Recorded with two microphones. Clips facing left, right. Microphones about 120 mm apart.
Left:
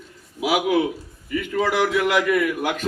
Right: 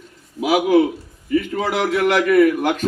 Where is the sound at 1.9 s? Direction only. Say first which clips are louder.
Right 5 dB; 45° right (ahead or behind).